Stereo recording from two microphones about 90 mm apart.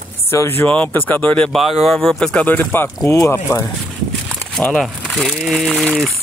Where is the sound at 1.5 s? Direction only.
Centre (ahead or behind).